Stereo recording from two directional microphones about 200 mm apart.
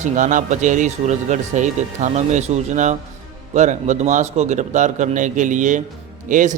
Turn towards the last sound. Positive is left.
turn(degrees=-40)  # may be behind; listen again after turning